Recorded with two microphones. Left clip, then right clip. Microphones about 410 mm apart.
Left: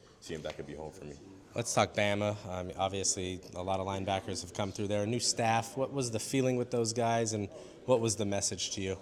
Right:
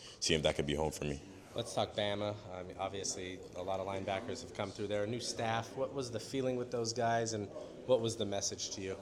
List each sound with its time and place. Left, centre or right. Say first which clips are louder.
0.2 s speech: right 8 dB; right
1.5 s a man's voice: left 6 dB; left